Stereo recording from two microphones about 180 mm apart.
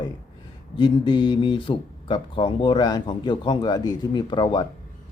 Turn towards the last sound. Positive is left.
turn(degrees=25)  # may be behind; listen again after turning